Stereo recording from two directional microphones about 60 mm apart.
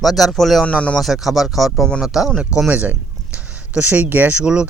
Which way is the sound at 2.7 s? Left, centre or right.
Right.